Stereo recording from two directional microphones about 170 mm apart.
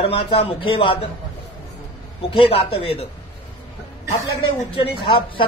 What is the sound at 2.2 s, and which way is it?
Speech, 35° left (ahead or behind).